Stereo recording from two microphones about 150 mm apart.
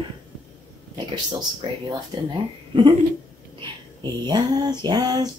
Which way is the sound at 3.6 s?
30° right (ahead or behind).